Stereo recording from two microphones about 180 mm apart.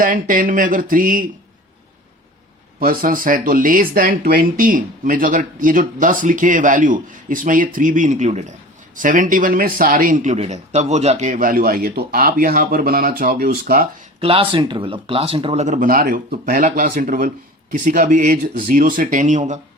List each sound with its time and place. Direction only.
0.0 s speech: 50° right (ahead or behind)
2.8 s speech: 50° right (ahead or behind)
14.2 s speech: 30° right (ahead or behind)
15.6 s speech: 45° right (ahead or behind)